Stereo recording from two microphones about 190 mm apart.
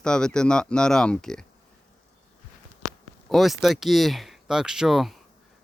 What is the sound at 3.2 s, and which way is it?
Speech, centre (ahead or behind).